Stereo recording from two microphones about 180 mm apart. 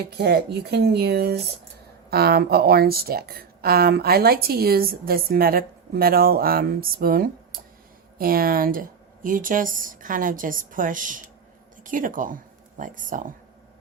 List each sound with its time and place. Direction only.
0.1 s a woman's voice: 65° right (ahead or behind); by 13.3 s 45° right (ahead or behind)